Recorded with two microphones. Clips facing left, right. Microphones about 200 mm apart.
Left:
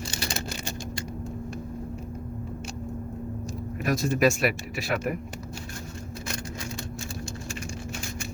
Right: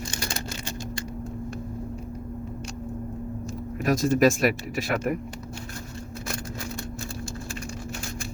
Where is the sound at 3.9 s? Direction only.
40° right (ahead or behind).